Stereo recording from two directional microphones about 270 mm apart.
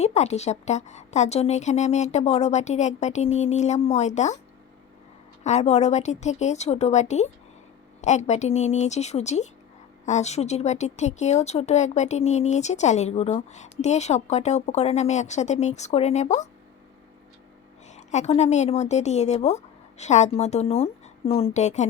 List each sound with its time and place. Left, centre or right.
0.0 s speech: left
5.4 s speech: left
17.8 s a woman's voice: left